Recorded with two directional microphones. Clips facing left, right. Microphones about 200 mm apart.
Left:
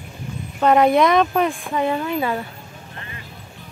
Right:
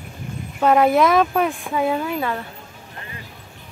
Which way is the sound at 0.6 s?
5° right (ahead or behind).